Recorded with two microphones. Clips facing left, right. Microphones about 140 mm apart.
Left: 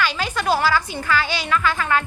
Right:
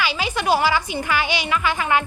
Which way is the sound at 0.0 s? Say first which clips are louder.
Even; 10° right (ahead or behind).